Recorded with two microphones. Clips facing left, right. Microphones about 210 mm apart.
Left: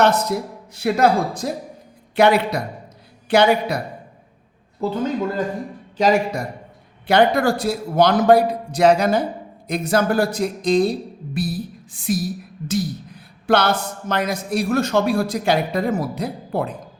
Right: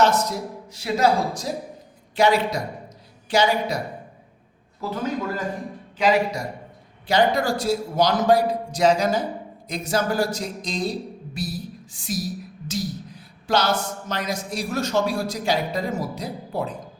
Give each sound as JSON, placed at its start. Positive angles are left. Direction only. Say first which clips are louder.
{"t": 0.0, "sound": "speech", "louder": "left 3 dB", "side_deg": 60}
{"t": 6.0, "sound": "speech", "louder": "left 3 dB", "side_deg": 45}